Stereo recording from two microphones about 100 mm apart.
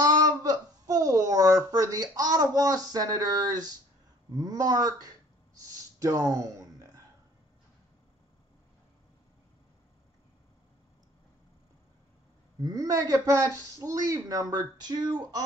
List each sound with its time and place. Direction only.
0.0 s a woman's voice: 40° right (ahead or behind)
4.3 s a sound: 40° right (ahead or behind)
12.6 s speech: 35° right (ahead or behind)